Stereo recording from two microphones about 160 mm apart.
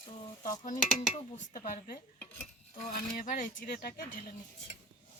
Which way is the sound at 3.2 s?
55° left (ahead or behind).